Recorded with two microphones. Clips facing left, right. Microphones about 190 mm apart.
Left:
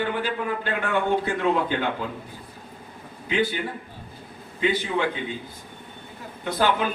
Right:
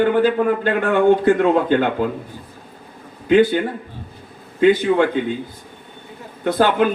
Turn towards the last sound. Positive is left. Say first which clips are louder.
# right 7 dB
turn(degrees=-55)  # may be behind; listen again after turning